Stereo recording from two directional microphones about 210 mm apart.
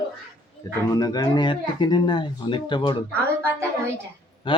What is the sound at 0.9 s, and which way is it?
Speech, 15° left (ahead or behind).